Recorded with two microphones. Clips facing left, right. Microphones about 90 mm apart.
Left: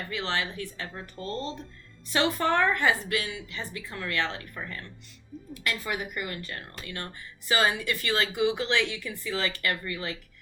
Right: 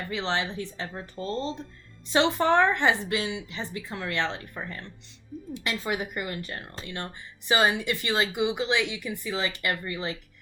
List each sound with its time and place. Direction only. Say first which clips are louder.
0.1 s speech: right 2 dB; 20° right (ahead or behind)